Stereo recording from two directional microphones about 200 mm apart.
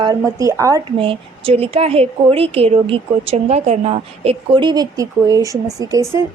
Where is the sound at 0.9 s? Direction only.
25° right (ahead or behind).